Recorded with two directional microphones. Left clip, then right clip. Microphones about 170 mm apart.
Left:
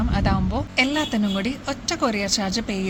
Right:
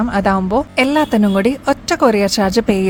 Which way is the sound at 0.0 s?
50° right (ahead or behind).